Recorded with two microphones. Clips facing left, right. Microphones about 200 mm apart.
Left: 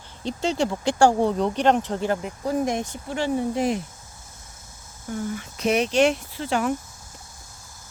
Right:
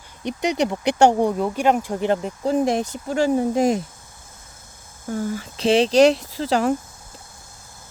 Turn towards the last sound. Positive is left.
turn(degrees=-35)  # may be behind; listen again after turning